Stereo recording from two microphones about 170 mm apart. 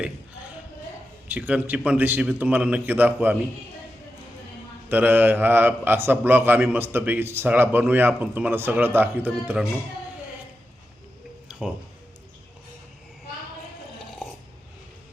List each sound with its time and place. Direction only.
1.3 s a man's voice: 10° right (ahead or behind)
4.9 s a man's voice: 10° right (ahead or behind)